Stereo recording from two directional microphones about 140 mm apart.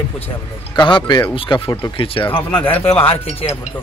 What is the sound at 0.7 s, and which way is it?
A man's voice, 35° left (ahead or behind).